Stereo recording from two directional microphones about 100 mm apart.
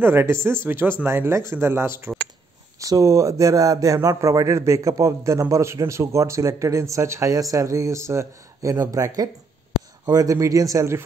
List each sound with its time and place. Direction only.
0.0 s speech: 25° right (ahead or behind)